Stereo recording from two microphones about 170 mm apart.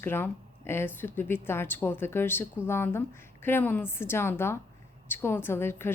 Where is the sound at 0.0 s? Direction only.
15° left (ahead or behind).